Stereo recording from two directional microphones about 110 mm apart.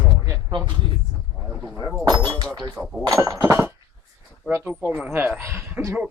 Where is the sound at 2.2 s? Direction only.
35° right (ahead or behind).